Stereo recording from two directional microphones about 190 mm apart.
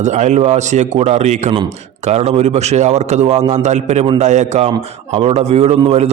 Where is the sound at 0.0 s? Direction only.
40° right (ahead or behind).